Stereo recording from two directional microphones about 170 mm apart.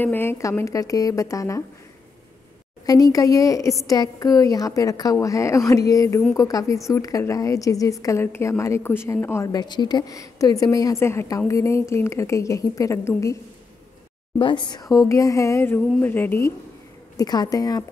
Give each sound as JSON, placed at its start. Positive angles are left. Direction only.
{"t": 0.0, "sound": "a woman's voice", "side_deg": 10}
{"t": 2.9, "sound": "a woman's voice", "side_deg": 20}
{"t": 14.4, "sound": "a woman's voice", "side_deg": 25}